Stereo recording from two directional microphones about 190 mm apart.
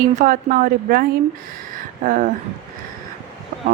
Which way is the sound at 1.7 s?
45° right (ahead or behind).